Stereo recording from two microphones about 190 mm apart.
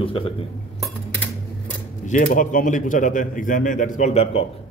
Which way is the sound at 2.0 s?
40° left (ahead or behind).